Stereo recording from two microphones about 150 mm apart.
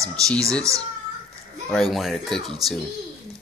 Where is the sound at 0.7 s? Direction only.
20° right (ahead or behind).